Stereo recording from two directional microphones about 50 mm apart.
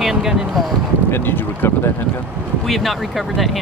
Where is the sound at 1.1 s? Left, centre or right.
Left.